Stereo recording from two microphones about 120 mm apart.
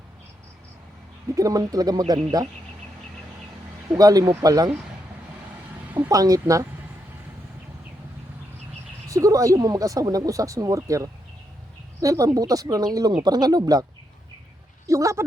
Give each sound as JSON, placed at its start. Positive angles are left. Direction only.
{"t": 1.4, "sound": "speech", "side_deg": -30}
{"t": 3.9, "sound": "speech", "side_deg": -30}
{"t": 6.1, "sound": "speech", "side_deg": -30}
{"t": 9.0, "sound": "speech", "side_deg": -30}
{"t": 14.8, "sound": "speech", "side_deg": -25}